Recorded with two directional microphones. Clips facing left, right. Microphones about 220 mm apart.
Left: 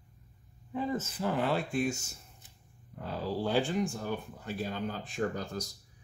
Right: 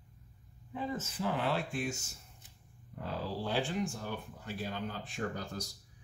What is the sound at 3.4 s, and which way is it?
Speech, 45° left (ahead or behind).